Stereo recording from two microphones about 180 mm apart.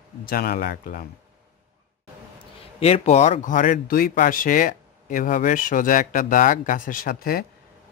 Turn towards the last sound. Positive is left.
turn(degrees=55)  # may be behind; listen again after turning